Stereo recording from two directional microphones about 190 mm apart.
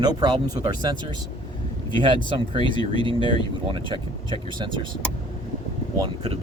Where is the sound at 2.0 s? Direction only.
25° right (ahead or behind).